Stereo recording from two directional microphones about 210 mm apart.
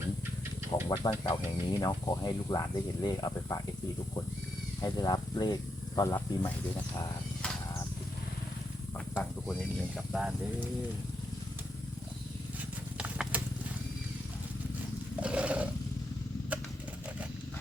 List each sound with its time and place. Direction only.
0.7 s speech: 20° left (ahead or behind)
4.8 s speech: 15° left (ahead or behind)
10.1 s speech: 5° right (ahead or behind)
13.0 s a sound: 5° right (ahead or behind)
15.2 s roar: 5° right (ahead or behind)